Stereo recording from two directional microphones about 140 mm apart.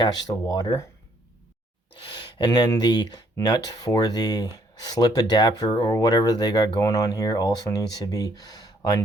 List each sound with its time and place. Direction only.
0.0 s speech: 30° left (ahead or behind)
2.4 s speech: 30° left (ahead or behind)